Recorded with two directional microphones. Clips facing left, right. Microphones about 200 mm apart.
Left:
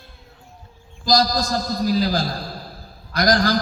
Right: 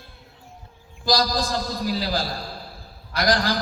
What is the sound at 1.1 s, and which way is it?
A man's voice, 40° left (ahead or behind).